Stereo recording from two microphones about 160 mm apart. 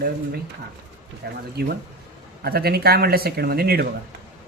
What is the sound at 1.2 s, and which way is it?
Speech, 85° right.